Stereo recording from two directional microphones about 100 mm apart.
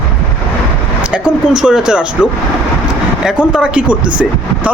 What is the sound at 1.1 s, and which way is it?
Speech, 10° right (ahead or behind).